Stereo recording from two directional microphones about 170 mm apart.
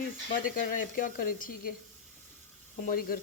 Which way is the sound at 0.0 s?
55° left (ahead or behind).